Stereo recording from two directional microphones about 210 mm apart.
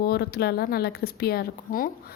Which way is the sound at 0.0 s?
50° left (ahead or behind).